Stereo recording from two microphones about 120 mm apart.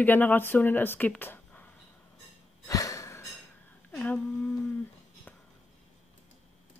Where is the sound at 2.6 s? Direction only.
30° left (ahead or behind).